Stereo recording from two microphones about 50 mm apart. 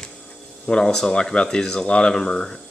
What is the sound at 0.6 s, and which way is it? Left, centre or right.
Speech, centre.